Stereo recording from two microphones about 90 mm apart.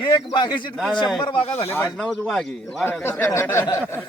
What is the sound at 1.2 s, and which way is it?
Speech, 80° left.